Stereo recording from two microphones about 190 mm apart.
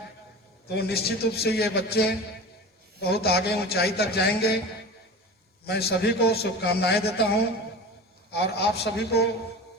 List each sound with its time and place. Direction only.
0.8 s a man's voice: 55° left (ahead or behind)
5.6 s a man's voice: 60° left (ahead or behind)